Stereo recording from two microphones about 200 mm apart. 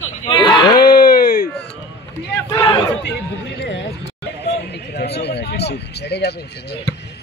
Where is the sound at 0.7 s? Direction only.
50° left (ahead or behind).